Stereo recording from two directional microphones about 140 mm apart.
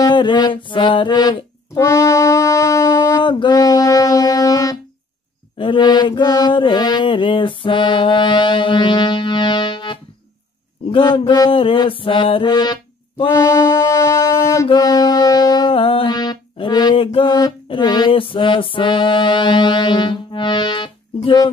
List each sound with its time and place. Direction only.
0.0 s music: 35° left (ahead or behind)
3.3 s music: 35° left (ahead or behind)
5.6 s mantra: 35° left (ahead or behind)
13.3 s mantra: 20° left (ahead or behind)
14.7 s music: 25° left (ahead or behind)
15.7 s music: 40° left (ahead or behind)